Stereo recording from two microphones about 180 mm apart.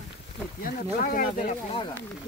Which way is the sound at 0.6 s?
50° left (ahead or behind).